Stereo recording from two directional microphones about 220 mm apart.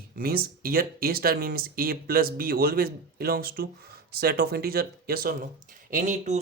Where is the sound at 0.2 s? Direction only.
45° right (ahead or behind).